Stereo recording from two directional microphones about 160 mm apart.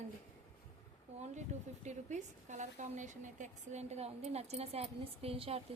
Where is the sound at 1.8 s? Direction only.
45° right (ahead or behind).